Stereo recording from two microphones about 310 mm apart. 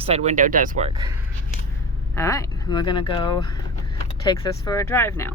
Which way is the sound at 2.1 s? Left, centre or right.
Centre.